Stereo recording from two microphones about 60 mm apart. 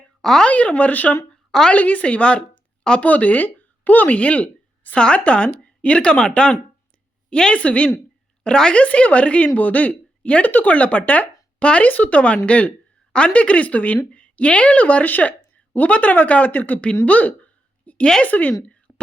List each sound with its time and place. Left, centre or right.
0.2 s speech: centre
0.4 s speech: left
1.3 s a sound: centre
1.7 s speech: left
17.1 s a sound: left
18.2 s speech: left
18.9 s whispering: left